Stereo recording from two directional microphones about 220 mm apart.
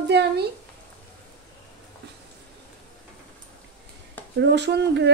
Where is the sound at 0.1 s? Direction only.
50° right (ahead or behind).